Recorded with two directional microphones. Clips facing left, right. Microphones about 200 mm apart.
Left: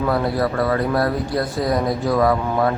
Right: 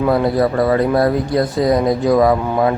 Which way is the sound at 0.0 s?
20° right (ahead or behind).